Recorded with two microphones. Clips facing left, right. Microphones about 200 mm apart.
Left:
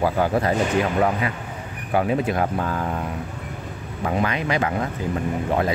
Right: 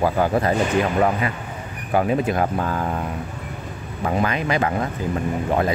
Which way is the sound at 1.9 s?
45° right (ahead or behind).